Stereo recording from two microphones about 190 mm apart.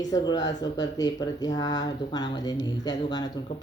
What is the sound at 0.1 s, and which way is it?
Speech, 20° left (ahead or behind).